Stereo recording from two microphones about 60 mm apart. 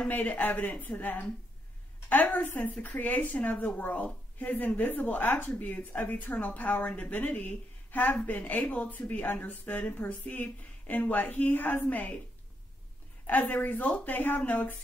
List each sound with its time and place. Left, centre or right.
0.1 s a woman's voice: left
13.3 s speech: left